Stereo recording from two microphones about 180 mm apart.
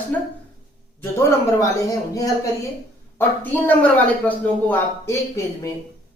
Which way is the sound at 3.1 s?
10° left (ahead or behind).